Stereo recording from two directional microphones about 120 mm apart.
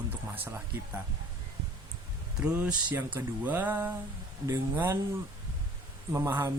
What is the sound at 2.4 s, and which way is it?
Speech, 10° right (ahead or behind).